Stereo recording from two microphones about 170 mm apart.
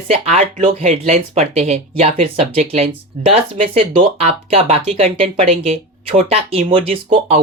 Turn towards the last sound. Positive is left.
turn(degrees=-35)  # may be behind; listen again after turning